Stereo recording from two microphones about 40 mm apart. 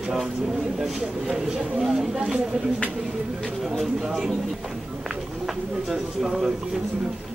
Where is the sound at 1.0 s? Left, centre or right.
Centre.